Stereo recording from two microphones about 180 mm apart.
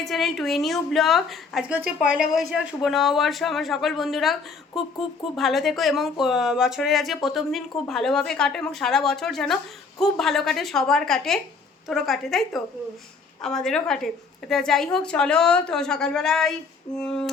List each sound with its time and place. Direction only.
0.0 s a woman's voice: centre (ahead or behind)